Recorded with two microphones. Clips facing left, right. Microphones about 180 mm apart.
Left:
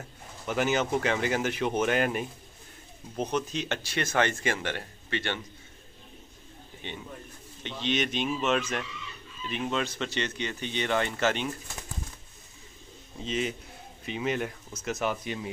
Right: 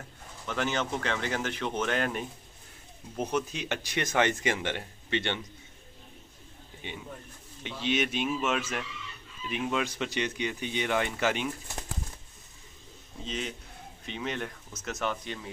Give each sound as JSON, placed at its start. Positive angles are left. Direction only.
{"t": 0.5, "sound": "speech", "side_deg": 10}
{"t": 3.2, "sound": "speech", "side_deg": -5}
{"t": 6.8, "sound": "speech", "side_deg": -10}
{"t": 13.2, "sound": "a man's voice", "side_deg": 5}